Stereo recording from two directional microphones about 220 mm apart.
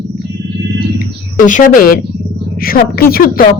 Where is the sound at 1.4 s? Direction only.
35° left (ahead or behind).